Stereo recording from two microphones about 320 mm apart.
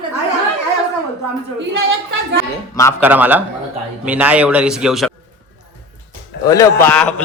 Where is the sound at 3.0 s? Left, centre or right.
Centre.